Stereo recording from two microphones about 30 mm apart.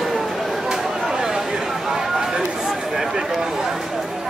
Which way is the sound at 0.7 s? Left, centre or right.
Centre.